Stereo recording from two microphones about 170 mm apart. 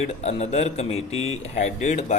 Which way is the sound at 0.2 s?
40° left (ahead or behind).